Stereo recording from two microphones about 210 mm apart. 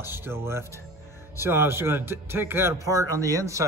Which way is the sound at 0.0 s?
10° right (ahead or behind).